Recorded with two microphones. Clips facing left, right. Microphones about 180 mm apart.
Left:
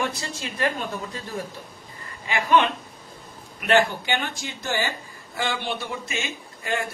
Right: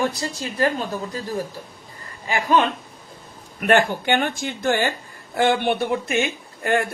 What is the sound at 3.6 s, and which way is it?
A woman's voice, 50° right (ahead or behind).